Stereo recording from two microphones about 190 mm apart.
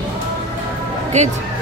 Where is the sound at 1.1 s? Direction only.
35° right (ahead or behind).